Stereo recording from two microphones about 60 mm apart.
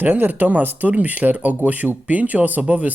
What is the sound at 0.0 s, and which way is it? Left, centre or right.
Speech, right.